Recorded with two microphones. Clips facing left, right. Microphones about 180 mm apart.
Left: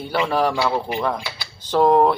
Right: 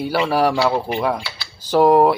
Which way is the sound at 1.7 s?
5° right (ahead or behind).